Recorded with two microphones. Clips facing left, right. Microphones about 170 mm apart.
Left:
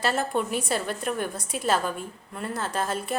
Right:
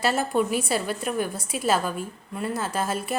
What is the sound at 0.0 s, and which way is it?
A woman's voice, 5° right (ahead or behind).